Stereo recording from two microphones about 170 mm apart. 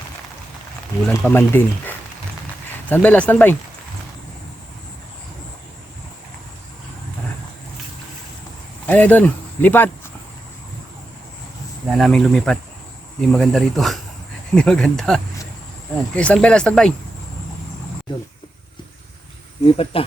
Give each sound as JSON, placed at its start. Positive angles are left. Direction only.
{"t": 1.0, "sound": "speech", "side_deg": 10}
{"t": 8.9, "sound": "speech", "side_deg": 10}
{"t": 11.9, "sound": "speech", "side_deg": 0}
{"t": 19.6, "sound": "speech", "side_deg": 35}